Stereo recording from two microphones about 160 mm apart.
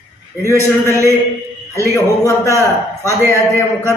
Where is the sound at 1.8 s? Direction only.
20° left (ahead or behind).